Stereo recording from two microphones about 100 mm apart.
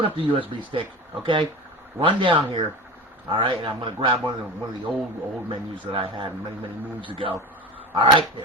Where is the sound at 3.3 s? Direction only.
50° right (ahead or behind).